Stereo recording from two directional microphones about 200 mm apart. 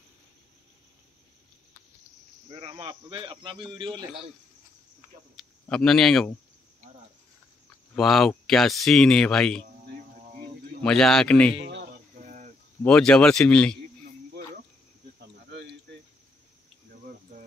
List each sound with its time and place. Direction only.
2.5 s speech: 25° right (ahead or behind)
5.3 s speech: 5° left (ahead or behind)
7.9 s speech: centre (ahead or behind)
10.8 s speech: 5° left (ahead or behind)
11.5 s a sound: 65° right (ahead or behind)
12.2 s cricket: 40° right (ahead or behind)
12.8 s speech: 5° left (ahead or behind)
15.5 s cricket: 60° right (ahead or behind)